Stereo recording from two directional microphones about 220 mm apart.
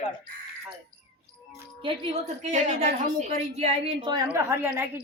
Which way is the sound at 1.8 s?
25° right (ahead or behind).